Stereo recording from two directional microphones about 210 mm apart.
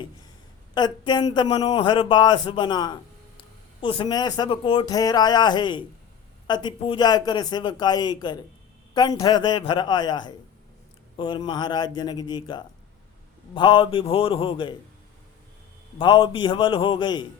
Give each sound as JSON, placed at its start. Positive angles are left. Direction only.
{"t": 0.7, "sound": "speech", "side_deg": 20}
{"t": 16.0, "sound": "speech", "side_deg": 25}